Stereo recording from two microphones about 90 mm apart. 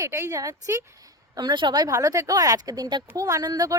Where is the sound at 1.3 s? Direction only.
55° right (ahead or behind).